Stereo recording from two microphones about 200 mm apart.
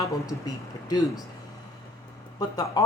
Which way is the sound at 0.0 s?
15° left (ahead or behind).